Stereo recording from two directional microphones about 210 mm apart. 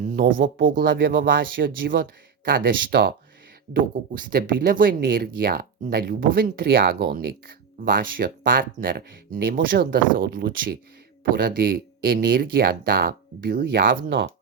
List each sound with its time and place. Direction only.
0.0 s speech: 40° right (ahead or behind)